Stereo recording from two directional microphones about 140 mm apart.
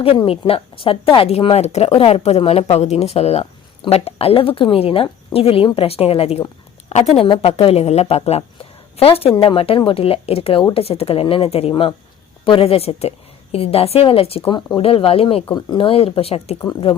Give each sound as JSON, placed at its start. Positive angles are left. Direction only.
{"t": 0.2, "sound": "speech", "side_deg": 40}
{"t": 11.7, "sound": "speech", "side_deg": 30}
{"t": 12.5, "sound": "speech", "side_deg": 45}